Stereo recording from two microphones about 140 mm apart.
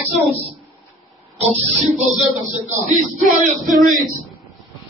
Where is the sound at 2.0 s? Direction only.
60° right (ahead or behind).